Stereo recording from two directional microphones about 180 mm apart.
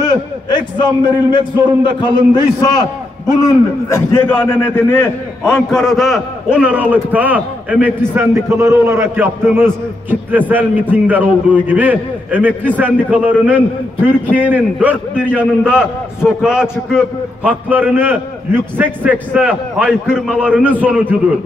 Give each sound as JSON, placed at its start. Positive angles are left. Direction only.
{"t": 0.0, "sound": "a man's voice", "side_deg": 25}